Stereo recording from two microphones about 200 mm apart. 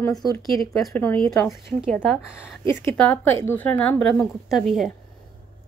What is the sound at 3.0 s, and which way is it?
A woman's voice, 5° left (ahead or behind).